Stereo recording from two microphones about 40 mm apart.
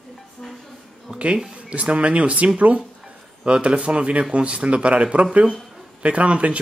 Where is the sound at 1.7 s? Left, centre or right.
Right.